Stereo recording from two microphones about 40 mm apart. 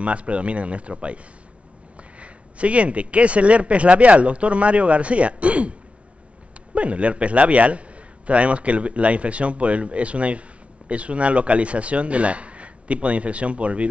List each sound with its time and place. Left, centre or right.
0.0 s speech: right